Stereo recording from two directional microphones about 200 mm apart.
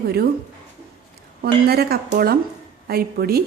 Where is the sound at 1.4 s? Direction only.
55° right (ahead or behind).